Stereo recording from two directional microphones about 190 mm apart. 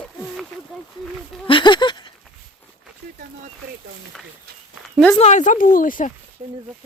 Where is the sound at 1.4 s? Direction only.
25° left (ahead or behind).